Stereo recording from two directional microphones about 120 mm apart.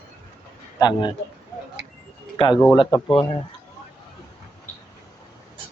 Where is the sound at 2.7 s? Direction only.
45° left (ahead or behind).